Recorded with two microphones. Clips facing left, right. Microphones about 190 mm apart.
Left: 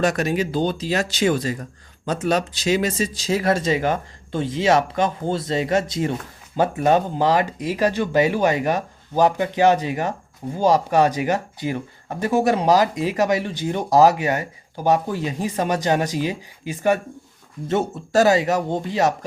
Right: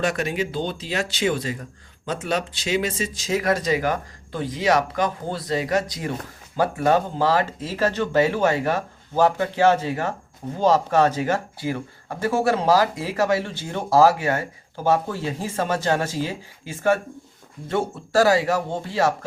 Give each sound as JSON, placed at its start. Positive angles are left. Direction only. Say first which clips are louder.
{"t": 0.0, "sound": "speech", "louder": "left 3 dB", "side_deg": 40}